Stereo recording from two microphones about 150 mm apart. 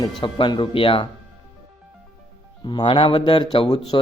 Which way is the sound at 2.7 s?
35° left (ahead or behind).